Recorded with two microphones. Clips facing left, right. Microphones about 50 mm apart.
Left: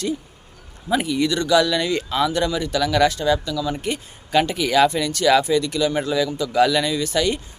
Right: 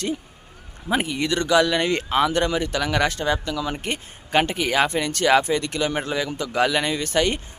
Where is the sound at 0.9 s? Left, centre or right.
Right.